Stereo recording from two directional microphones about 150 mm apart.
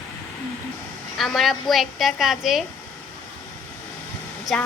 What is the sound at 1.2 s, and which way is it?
A woman's voice, centre (ahead or behind).